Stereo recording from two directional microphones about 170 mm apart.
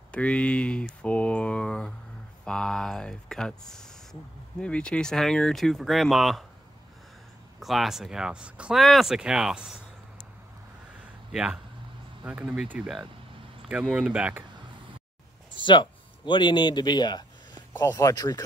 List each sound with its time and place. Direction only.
0.1 s a sound: 5° left (ahead or behind)
2.4 s speech: 5° left (ahead or behind)
7.6 s speech: centre (ahead or behind)
11.3 s speech: 5° right (ahead or behind)
15.5 s speech: 30° left (ahead or behind)